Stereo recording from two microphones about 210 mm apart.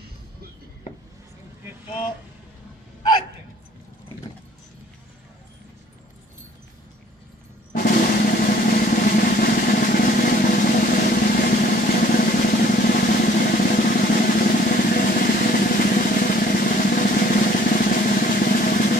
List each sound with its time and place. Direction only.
7.7 s drum roll: 40° left (ahead or behind)
13.7 s drum: 45° left (ahead or behind)